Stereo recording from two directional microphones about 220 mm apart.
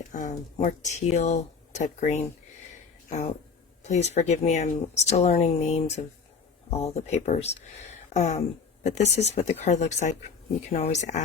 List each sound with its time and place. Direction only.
0.1 s speech: 35° left (ahead or behind)